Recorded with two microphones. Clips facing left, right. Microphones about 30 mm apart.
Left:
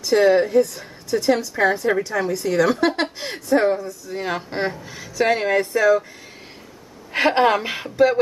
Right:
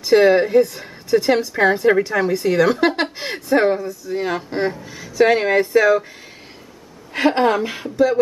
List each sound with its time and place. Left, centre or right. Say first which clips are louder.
0.0 s a woman's voice: right 3 dB; right
3.8 s speech: right 4 dB; centre
7.1 s a woman's voice: even; centre